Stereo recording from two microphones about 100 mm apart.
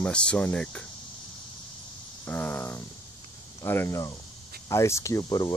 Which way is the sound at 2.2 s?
15° left (ahead or behind).